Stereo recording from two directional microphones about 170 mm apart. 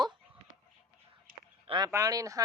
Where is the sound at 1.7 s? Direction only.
25° right (ahead or behind).